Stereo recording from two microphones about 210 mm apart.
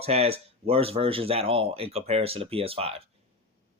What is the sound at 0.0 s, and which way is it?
Speech, 30° right (ahead or behind).